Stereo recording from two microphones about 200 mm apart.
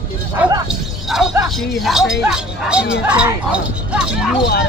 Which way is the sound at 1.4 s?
Centre (ahead or behind).